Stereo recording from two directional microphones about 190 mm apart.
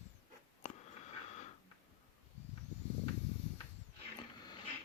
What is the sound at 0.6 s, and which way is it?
Sniff, 40° left (ahead or behind).